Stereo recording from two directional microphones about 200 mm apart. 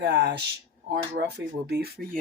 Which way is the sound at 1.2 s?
45° right (ahead or behind).